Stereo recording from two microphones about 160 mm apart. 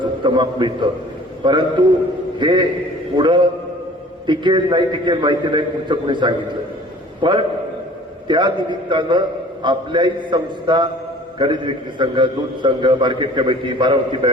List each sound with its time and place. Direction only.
0.0 s a man's voice: 30° right (ahead or behind)